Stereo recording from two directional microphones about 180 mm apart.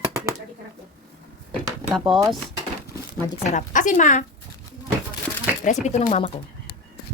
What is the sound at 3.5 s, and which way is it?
Speech, 45° left (ahead or behind).